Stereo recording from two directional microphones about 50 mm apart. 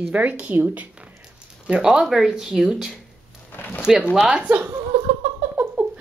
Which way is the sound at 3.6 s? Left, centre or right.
Left.